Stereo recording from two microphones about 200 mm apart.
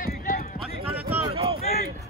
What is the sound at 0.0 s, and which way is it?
Run, 45° left (ahead or behind).